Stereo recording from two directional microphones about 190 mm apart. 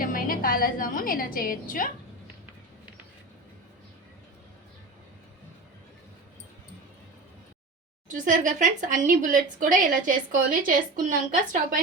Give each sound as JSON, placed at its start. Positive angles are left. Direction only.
{"t": 0.0, "sound": "a woman's voice", "side_deg": 50}
{"t": 8.0, "sound": "speech", "side_deg": -40}